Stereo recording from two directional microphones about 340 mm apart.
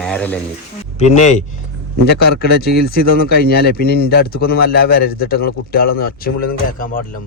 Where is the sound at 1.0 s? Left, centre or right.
Centre.